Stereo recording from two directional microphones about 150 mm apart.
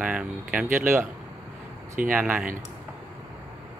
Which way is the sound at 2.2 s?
10° right (ahead or behind).